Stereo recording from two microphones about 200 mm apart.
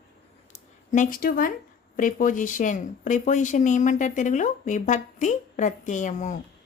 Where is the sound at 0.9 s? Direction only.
40° left (ahead or behind).